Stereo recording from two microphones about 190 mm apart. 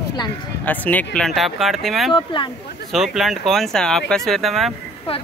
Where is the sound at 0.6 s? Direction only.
10° left (ahead or behind).